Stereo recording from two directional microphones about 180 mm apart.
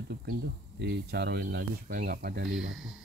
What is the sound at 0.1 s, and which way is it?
Speech, 70° right (ahead or behind).